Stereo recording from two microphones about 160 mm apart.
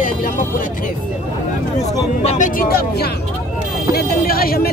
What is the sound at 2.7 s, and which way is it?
Speech, 70° left (ahead or behind).